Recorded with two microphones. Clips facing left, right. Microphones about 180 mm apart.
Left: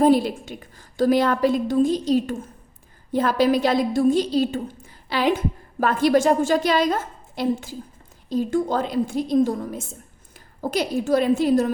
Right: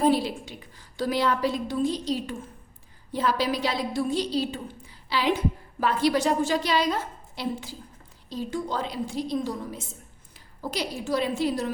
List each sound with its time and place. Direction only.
0.0 s a woman's voice: 50° left (ahead or behind)